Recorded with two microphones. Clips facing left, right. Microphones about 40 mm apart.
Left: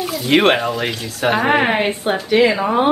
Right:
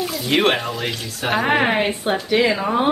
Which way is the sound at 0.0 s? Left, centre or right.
Centre.